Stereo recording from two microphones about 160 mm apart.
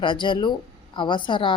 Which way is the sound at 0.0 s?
30° left (ahead or behind).